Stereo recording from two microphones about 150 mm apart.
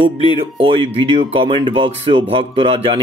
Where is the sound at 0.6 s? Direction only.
35° right (ahead or behind).